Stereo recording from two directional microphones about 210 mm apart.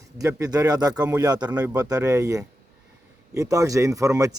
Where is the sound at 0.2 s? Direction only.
15° right (ahead or behind).